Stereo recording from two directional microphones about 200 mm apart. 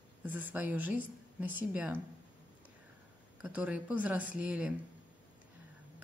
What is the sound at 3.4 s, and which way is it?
Speech, 5° right (ahead or behind).